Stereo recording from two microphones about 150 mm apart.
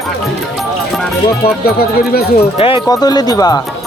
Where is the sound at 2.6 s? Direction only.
40° left (ahead or behind).